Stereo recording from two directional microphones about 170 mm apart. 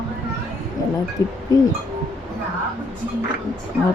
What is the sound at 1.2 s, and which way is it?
Speech, 20° left (ahead or behind).